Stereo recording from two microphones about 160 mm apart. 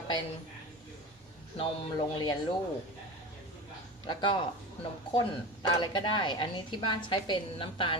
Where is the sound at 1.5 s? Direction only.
30° left (ahead or behind).